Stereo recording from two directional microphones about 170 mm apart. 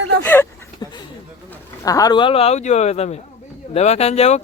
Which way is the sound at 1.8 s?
20° left (ahead or behind).